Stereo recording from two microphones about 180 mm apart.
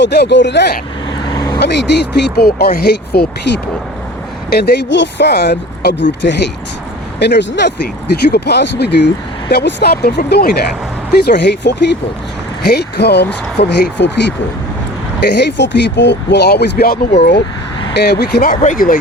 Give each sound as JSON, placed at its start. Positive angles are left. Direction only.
{"t": 0.0, "sound": "speech", "side_deg": 70}
{"t": 1.3, "sound": "vehicle", "side_deg": 20}
{"t": 1.5, "sound": "speech", "side_deg": 70}
{"t": 18.6, "sound": "speech", "side_deg": 45}